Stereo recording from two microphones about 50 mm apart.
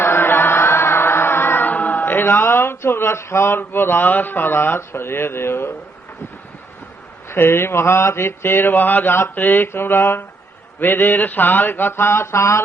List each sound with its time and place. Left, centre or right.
0.0 s chant: left
1.7 s speech: left
7.3 s speech: left
9.3 s speech: left